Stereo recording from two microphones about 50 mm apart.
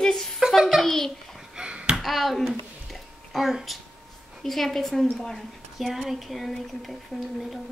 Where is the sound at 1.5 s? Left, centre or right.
Right.